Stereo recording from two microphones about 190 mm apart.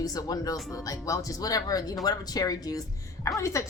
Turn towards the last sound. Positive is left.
turn(degrees=15)  # may be behind; listen again after turning